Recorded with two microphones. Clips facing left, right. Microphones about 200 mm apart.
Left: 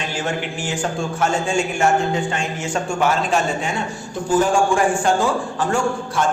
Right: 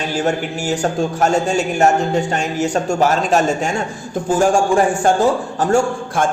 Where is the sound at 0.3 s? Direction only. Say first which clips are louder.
Right 5 dB; 40° right (ahead or behind).